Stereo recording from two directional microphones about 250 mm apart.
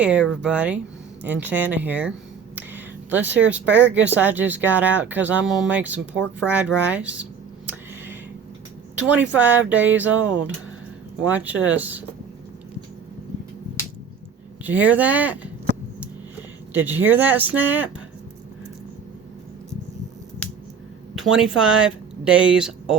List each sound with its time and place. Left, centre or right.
0.0 s speech: centre
2.6 s a sound: centre
3.2 s speech: right
4.1 s speech: centre
7.7 s a sound: centre
9.0 s speech: centre
14.6 s speech: centre
16.7 s speech: centre
21.2 s speech: centre